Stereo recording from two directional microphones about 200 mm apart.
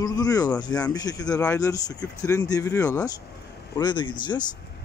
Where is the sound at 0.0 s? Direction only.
20° left (ahead or behind).